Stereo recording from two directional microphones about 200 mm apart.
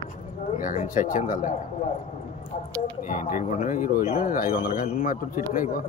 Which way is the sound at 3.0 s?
40° left (ahead or behind).